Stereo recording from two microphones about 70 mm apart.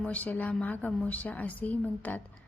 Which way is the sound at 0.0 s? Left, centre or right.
Left.